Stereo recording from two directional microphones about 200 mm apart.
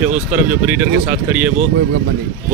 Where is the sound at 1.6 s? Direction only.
50° right (ahead or behind).